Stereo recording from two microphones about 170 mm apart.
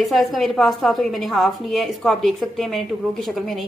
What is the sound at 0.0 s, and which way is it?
A woman's voice, centre (ahead or behind).